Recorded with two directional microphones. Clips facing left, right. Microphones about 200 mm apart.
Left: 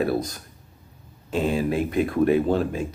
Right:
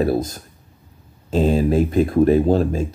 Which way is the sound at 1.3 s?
35° right (ahead or behind).